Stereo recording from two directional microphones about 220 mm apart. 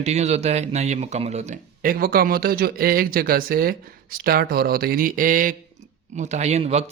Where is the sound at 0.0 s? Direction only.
30° right (ahead or behind).